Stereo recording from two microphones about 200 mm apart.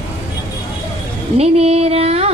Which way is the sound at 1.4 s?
30° right (ahead or behind).